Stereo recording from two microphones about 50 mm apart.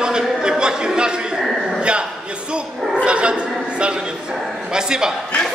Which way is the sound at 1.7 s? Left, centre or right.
Right.